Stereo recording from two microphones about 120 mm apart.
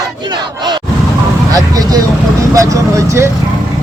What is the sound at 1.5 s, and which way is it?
Speech, 30° right (ahead or behind).